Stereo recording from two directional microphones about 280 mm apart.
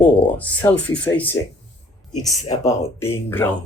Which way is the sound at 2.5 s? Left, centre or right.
Centre.